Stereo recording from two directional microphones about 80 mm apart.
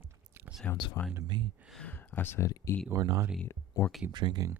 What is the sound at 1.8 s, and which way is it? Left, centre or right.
Speech, left.